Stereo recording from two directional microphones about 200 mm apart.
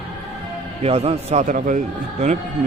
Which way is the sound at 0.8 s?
30° right (ahead or behind).